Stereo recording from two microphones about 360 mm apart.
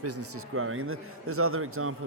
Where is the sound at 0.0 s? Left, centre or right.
Right.